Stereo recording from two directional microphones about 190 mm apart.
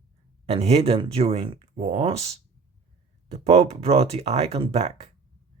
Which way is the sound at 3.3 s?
35° right (ahead or behind).